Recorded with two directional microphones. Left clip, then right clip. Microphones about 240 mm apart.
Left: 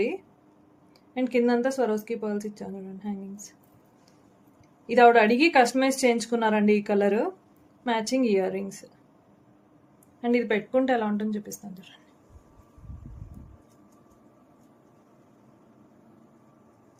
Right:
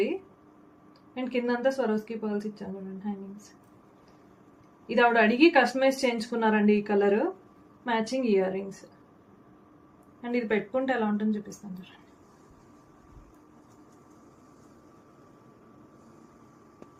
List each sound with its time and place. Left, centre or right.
1.1 s speech: left
4.9 s speech: left
10.2 s speech: left